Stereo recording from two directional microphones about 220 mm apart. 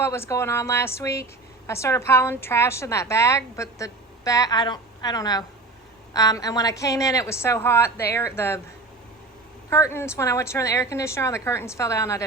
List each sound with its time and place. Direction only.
0.0 s a woman's voice: 10° left (ahead or behind)
9.6 s a woman's voice: 10° left (ahead or behind)